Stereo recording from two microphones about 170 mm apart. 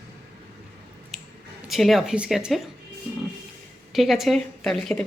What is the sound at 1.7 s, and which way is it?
Speech, centre (ahead or behind).